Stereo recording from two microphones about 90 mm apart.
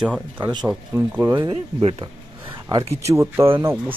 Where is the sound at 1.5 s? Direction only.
90° right.